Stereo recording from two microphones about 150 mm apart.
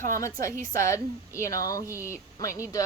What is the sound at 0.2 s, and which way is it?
Speech, 20° left (ahead or behind).